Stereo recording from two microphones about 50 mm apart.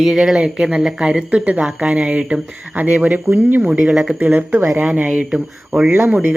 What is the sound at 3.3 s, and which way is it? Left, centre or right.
Speech, right.